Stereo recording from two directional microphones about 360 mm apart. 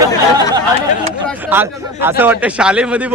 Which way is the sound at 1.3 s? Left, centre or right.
Centre.